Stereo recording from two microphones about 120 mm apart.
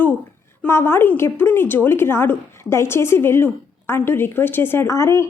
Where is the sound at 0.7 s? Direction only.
20° left (ahead or behind).